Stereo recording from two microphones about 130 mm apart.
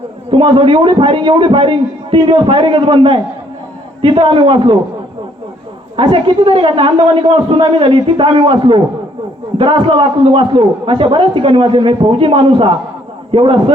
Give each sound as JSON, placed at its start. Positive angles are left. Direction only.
{"t": 0.3, "sound": "a man's voice", "side_deg": -40}
{"t": 6.0, "sound": "a man's voice", "side_deg": -40}